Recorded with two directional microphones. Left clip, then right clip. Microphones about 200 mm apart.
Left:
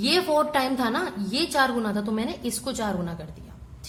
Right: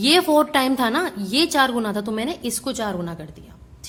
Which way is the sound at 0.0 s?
35° right (ahead or behind).